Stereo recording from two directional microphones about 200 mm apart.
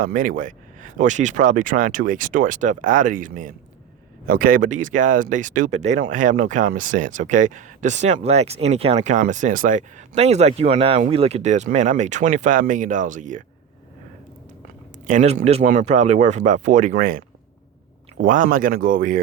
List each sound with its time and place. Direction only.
0.0 s speech: 40° right (ahead or behind)
15.0 s speech: 40° right (ahead or behind)